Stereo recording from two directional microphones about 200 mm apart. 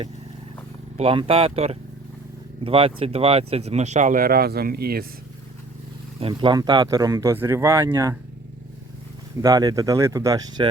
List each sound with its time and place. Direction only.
0.9 s speech: 25° right (ahead or behind); by 5.0 s 50° right (ahead or behind)
6.1 s speech: 25° right (ahead or behind)
9.4 s speech: 20° right (ahead or behind)